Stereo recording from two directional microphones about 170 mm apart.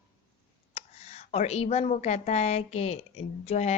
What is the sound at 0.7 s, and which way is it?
A woman's voice, 40° left (ahead or behind).